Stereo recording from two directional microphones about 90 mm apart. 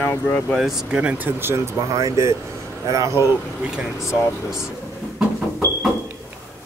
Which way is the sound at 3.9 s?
30° left (ahead or behind).